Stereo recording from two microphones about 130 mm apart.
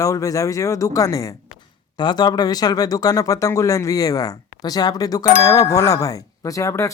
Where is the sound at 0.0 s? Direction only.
25° left (ahead or behind).